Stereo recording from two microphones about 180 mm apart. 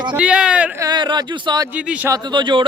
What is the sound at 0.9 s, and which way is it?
Speech, 25° right (ahead or behind).